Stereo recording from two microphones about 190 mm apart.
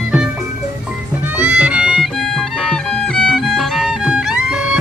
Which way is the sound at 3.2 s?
5° left (ahead or behind).